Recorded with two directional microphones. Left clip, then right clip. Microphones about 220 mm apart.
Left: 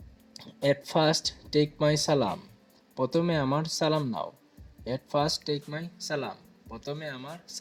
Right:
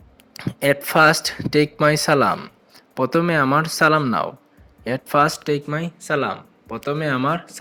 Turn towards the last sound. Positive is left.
turn(degrees=-20)  # may be behind; listen again after turning